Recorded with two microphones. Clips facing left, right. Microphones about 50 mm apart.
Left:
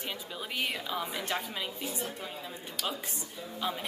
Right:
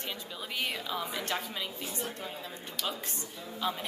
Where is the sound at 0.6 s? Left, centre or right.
Centre.